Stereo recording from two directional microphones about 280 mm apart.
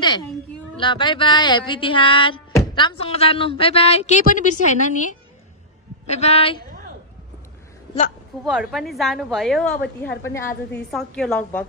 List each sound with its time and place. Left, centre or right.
0.7 s speech: centre
8.5 s a woman's voice: centre